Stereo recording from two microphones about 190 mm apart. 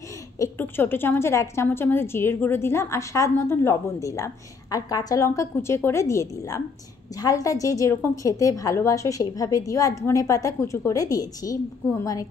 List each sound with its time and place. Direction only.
0.4 s a woman's voice: 10° left (ahead or behind)